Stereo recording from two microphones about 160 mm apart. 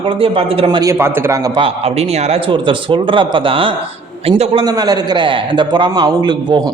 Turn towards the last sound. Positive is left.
turn(degrees=-25)  # may be behind; listen again after turning